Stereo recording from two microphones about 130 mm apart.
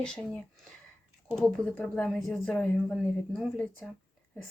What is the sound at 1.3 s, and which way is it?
A woman's voice, 5° left (ahead or behind).